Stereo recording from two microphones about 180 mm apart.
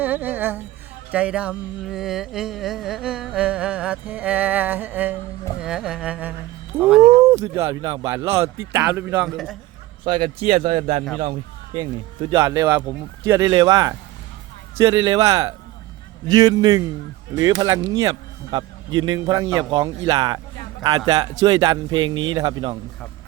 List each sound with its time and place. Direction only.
0.0 s a sound: 10° right (ahead or behind)
1.1 s speech: 5° right (ahead or behind)
7.3 s a sound: 15° right (ahead or behind)
7.6 s a man's voice: 20° right (ahead or behind)
10.0 s a man's voice: 30° right (ahead or behind)
12.4 s a man's voice: 15° right (ahead or behind)